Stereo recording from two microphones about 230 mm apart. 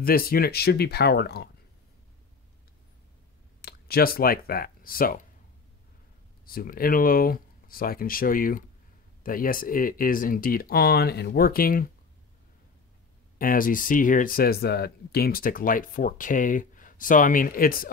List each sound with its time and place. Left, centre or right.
0.0 s speech: left
3.6 s speech: left
6.4 s speech: left
13.4 s speech: left